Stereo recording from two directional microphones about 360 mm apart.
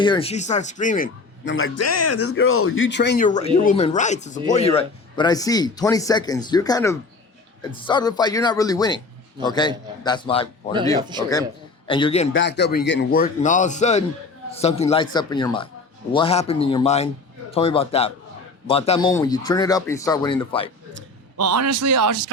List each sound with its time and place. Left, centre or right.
0.0 s speech: centre
1.5 s speech: left; by 10.5 s centre
11.1 s speech: centre
11.9 s speech: centre
12.3 s speech: left; by 20.7 s centre
20.9 s a man's voice: right